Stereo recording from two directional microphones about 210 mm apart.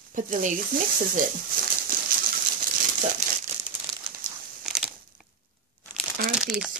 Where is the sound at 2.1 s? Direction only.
45° right (ahead or behind).